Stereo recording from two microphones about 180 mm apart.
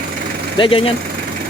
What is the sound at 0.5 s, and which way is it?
Speech, 30° left (ahead or behind).